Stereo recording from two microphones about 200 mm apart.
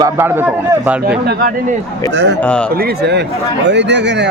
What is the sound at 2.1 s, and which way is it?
Speech, 65° right (ahead or behind).